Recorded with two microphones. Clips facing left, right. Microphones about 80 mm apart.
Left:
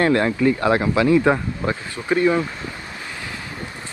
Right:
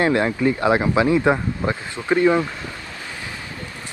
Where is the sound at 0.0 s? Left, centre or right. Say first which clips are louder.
Left 1 dB; centre.